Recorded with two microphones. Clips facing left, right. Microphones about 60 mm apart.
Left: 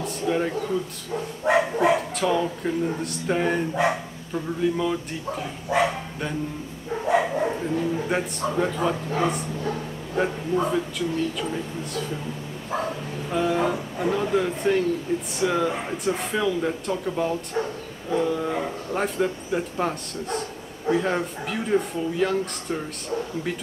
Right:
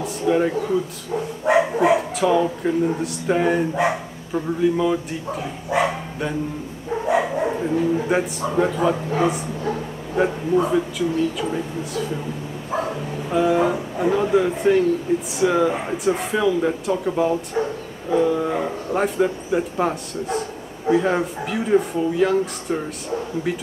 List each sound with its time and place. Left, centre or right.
0.0 s speech: centre
1.4 s dog: centre
2.1 s speech: centre
3.7 s speech: centre
4.6 s speech: centre
7.1 s speech: centre
13.3 s speech: centre